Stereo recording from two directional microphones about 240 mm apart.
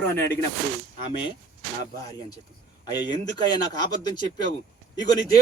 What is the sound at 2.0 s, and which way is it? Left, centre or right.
Speech, centre.